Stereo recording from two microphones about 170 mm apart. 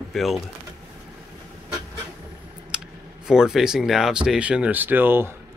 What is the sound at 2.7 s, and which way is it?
Typing, 5° right (ahead or behind).